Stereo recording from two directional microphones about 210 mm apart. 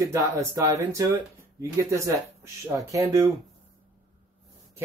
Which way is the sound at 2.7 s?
15° right (ahead or behind).